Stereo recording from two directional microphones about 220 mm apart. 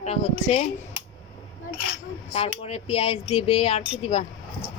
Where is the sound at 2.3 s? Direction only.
30° left (ahead or behind).